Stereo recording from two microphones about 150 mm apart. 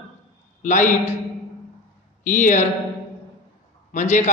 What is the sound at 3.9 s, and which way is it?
Speech, 55° left (ahead or behind).